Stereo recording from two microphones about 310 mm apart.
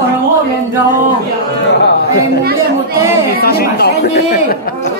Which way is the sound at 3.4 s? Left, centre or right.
Left.